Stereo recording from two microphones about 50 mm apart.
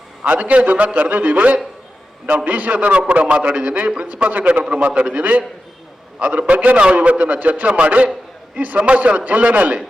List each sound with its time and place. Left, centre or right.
0.2 s a man's voice: right
4.0 s a man's voice: right